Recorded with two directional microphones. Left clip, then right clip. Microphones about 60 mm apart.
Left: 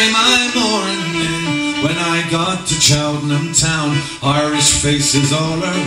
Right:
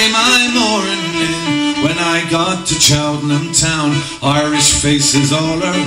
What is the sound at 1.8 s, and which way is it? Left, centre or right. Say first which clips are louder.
Music: right 2 dB; centre.